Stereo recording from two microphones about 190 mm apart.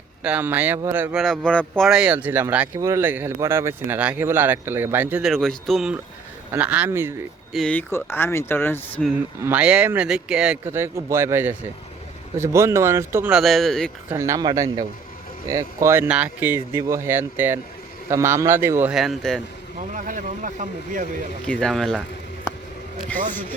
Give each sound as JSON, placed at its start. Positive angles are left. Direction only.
{"t": 0.2, "sound": "speech", "side_deg": -10}
{"t": 1.5, "sound": "speech", "side_deg": 5}
{"t": 7.5, "sound": "speech", "side_deg": 5}
{"t": 9.0, "sound": "speech", "side_deg": -10}
{"t": 13.4, "sound": "speech", "side_deg": 0}
{"t": 14.1, "sound": "speech", "side_deg": -15}
{"t": 19.9, "sound": "speech", "side_deg": -40}
{"t": 21.4, "sound": "speech", "side_deg": 5}